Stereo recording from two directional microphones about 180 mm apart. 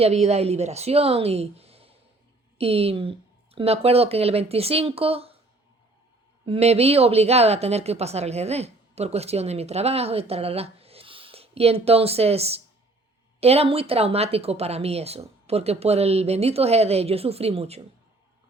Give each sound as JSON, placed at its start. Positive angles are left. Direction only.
{"t": 0.0, "sound": "speech", "side_deg": -35}
{"t": 6.4, "sound": "speech", "side_deg": -35}